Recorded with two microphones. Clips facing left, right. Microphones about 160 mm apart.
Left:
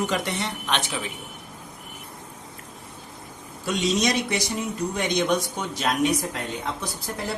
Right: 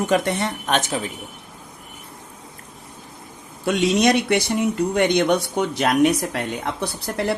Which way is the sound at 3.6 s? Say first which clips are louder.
Right 6 dB; 60° right (ahead or behind).